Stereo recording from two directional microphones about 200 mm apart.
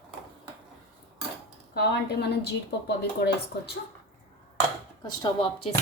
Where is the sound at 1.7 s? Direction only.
55° left (ahead or behind).